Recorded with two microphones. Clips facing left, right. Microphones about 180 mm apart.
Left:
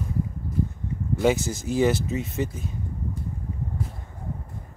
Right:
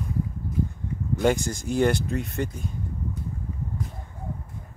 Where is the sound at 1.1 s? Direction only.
5° left (ahead or behind).